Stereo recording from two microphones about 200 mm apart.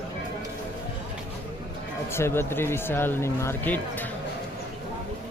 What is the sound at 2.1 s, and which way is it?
Speech, 10° left (ahead or behind).